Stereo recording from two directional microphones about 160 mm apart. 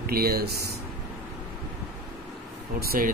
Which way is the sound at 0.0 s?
70° right (ahead or behind).